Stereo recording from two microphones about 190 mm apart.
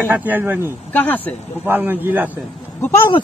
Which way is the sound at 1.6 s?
10° right (ahead or behind).